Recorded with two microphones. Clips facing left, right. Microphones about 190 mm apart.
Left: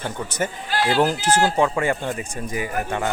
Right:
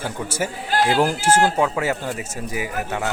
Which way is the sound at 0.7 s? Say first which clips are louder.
Right 3 dB; 45° right (ahead or behind).